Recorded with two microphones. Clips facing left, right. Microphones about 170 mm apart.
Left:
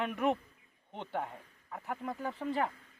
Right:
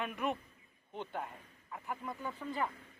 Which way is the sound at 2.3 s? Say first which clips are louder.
Left 6 dB; 70° left (ahead or behind).